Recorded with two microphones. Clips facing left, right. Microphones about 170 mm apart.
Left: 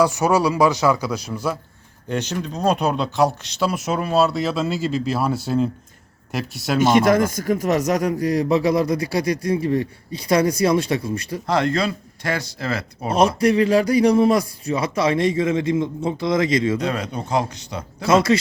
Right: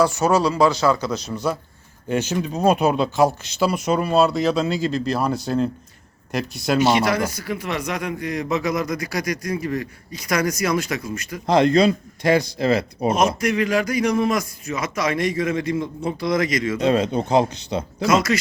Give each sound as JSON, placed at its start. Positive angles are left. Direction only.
{"t": 0.0, "sound": "speech", "side_deg": 15}
{"t": 6.7, "sound": "a man's voice", "side_deg": 50}
{"t": 11.4, "sound": "speech", "side_deg": -20}
{"t": 13.1, "sound": "a man's voice", "side_deg": 30}
{"t": 16.7, "sound": "speech", "side_deg": -25}
{"t": 18.0, "sound": "a man's voice", "side_deg": 30}